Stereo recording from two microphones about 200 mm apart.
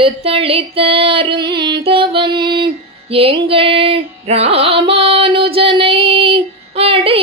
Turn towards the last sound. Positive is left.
turn(degrees=-30)  # may be behind; listen again after turning